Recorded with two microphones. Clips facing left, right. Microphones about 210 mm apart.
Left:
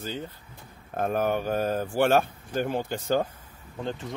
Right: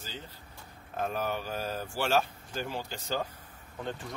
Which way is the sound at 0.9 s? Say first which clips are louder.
Left 7 dB; 55° left (ahead or behind).